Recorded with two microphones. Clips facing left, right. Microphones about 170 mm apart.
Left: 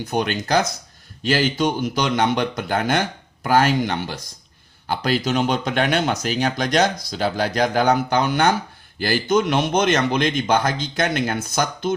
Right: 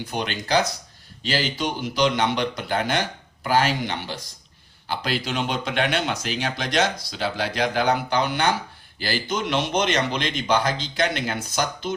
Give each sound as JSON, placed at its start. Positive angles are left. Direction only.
{"t": 0.0, "sound": "a man's voice", "side_deg": 45}